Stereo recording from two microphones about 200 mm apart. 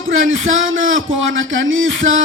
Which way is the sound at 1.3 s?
75° right (ahead or behind).